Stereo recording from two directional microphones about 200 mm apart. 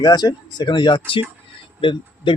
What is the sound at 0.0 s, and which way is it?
Speech, 20° left (ahead or behind).